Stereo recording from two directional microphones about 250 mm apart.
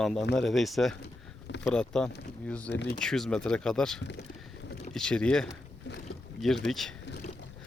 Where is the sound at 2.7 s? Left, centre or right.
Left.